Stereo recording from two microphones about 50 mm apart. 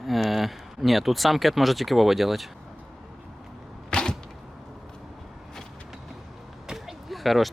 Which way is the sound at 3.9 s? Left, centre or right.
Centre.